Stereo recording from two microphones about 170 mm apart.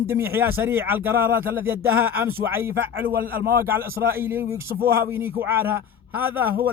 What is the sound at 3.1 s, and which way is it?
Speech, 60° right (ahead or behind).